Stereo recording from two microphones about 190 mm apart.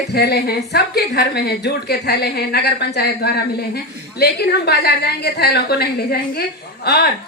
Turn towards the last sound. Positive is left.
turn(degrees=60)  # may be behind; listen again after turning